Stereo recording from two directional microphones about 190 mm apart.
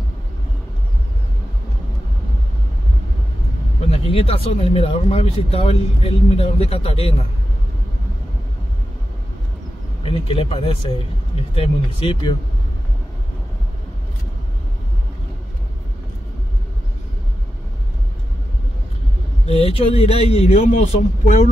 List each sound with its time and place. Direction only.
3.9 s speech: 30° left (ahead or behind)
10.0 s speech: 30° left (ahead or behind)
19.4 s speech: 30° left (ahead or behind)